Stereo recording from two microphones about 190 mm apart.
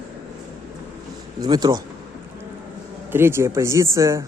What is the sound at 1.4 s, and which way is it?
Speech, 20° right (ahead or behind).